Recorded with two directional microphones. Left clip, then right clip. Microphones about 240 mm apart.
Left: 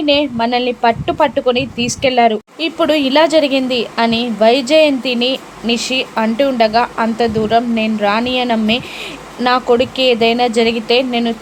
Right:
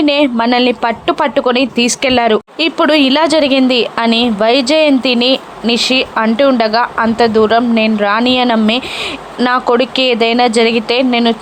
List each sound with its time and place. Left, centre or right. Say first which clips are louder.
0.0 s a woman's voice: right 2 dB; centre